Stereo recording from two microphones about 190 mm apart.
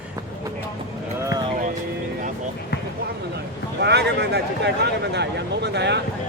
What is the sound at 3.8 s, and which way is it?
Speech, 60° right (ahead or behind).